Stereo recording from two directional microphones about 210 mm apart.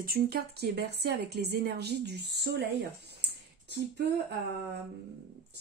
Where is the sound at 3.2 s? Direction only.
50° right (ahead or behind).